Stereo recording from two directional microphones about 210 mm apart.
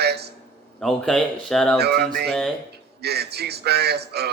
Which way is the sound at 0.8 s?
Centre (ahead or behind).